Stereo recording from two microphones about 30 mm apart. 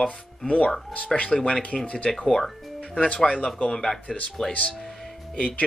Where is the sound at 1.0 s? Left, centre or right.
Left.